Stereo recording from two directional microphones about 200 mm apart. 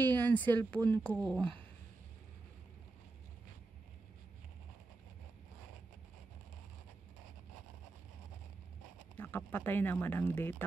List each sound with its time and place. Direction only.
0.0 s speech: 10° left (ahead or behind)
9.2 s speech: 10° left (ahead or behind)